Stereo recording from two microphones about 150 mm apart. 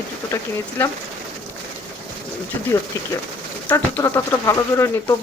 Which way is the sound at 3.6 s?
20° left (ahead or behind).